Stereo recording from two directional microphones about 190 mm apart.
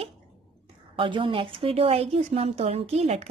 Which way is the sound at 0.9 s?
25° right (ahead or behind).